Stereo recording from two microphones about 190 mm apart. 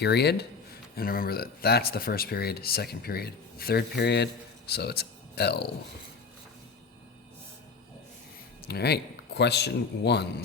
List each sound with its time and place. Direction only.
0.0 s speech: 60° left (ahead or behind)
8.6 s a man's voice: 60° left (ahead or behind)